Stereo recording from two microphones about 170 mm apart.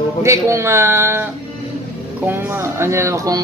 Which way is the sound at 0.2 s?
15° right (ahead or behind).